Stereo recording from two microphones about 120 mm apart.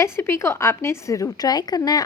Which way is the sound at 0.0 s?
20° left (ahead or behind).